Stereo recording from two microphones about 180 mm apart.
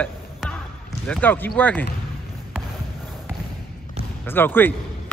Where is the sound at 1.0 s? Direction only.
5° left (ahead or behind).